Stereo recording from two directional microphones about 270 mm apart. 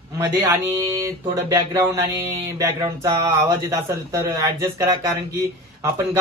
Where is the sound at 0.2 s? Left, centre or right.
Centre.